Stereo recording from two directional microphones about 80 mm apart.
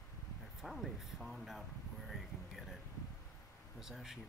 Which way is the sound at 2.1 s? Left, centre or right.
Centre.